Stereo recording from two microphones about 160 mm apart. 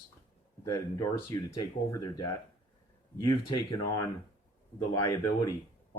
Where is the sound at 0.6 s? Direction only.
20° left (ahead or behind).